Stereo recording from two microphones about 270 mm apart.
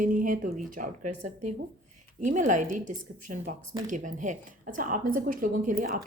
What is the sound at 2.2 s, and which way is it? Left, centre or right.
Speech, right.